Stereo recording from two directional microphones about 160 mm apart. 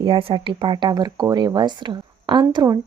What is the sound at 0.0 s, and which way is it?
Speech, 30° right (ahead or behind).